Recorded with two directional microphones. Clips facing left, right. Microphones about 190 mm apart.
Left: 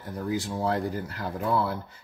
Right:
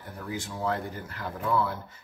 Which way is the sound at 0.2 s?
35° left (ahead or behind).